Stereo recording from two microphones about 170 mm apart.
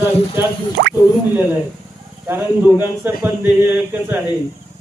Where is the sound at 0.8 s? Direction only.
60° right (ahead or behind).